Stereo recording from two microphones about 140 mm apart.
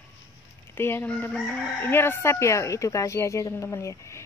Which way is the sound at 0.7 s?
15° left (ahead or behind).